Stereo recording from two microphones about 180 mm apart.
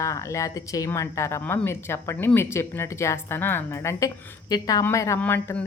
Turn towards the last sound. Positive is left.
turn(degrees=10)  # may be behind; listen again after turning